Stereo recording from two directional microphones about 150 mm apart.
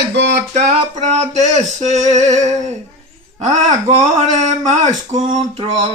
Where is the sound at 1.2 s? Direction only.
50° right (ahead or behind).